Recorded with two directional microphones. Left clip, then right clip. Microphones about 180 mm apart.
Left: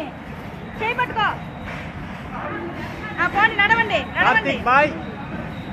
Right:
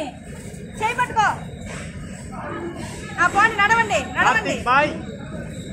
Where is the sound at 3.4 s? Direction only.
65° right (ahead or behind).